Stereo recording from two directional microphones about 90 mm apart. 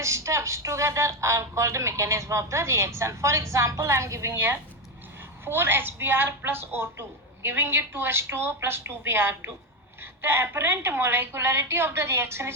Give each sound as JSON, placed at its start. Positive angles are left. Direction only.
{"t": 0.0, "sound": "a woman's voice", "side_deg": -35}